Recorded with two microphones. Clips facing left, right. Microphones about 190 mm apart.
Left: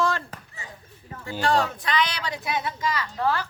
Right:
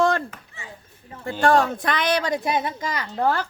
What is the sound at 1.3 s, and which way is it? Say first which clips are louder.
A woman's voice: right 5 dB; 50° right (ahead or behind).